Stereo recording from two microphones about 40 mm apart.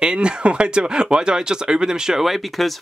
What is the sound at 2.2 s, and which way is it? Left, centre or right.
Speech, centre.